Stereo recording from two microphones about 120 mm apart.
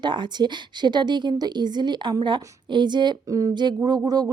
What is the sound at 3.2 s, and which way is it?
Speech, 30° right (ahead or behind).